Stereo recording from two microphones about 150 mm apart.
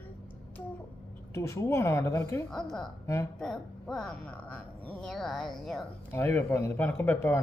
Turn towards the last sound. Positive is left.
turn(degrees=15)  # may be behind; listen again after turning